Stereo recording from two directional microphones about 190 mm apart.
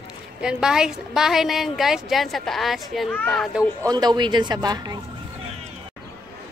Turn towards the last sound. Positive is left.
turn(degrees=-20)  # may be behind; listen again after turning